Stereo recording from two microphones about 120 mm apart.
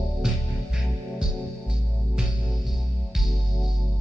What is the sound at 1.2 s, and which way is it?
Music, 5° right (ahead or behind).